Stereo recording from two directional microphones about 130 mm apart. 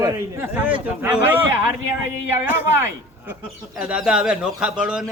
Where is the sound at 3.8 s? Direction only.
5° right (ahead or behind).